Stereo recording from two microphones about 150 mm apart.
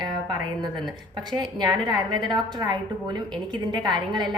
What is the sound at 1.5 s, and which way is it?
A woman's voice, 25° right (ahead or behind).